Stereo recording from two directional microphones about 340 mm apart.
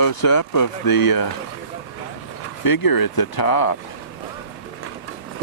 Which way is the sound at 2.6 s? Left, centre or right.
Left.